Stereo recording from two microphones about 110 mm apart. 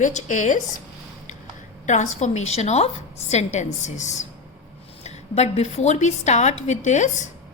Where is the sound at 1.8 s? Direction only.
90° left.